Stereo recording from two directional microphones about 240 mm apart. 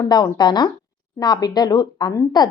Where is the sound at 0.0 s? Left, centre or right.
Centre.